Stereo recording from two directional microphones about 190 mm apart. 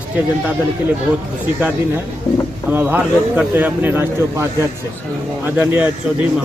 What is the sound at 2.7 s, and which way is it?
A man's voice, 10° right (ahead or behind).